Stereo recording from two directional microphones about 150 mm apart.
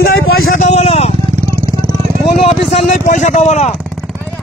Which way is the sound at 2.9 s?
55° left (ahead or behind).